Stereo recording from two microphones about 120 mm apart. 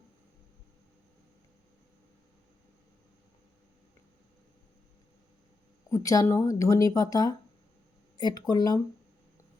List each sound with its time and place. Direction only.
5.9 s speech: 25° left (ahead or behind)